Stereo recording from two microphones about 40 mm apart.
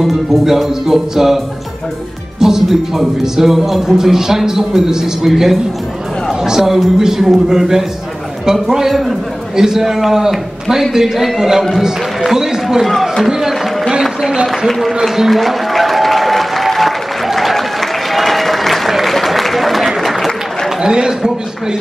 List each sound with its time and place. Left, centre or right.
0.0 s a man's voice: centre
2.4 s a man's voice: centre
12.3 s a sound: centre
12.8 s speech: centre
15.1 s applause: centre
20.8 s a man's voice: centre